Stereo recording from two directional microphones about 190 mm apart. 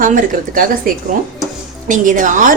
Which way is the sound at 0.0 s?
45° right (ahead or behind).